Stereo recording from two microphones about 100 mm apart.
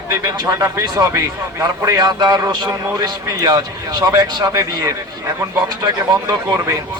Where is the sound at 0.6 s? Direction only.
35° right (ahead or behind).